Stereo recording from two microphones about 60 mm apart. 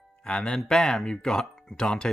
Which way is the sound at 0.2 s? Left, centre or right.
Centre.